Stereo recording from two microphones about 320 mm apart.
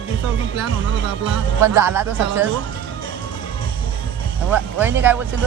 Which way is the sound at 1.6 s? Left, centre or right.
Centre.